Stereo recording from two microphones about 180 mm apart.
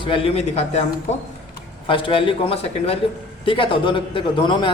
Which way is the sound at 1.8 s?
30° left (ahead or behind).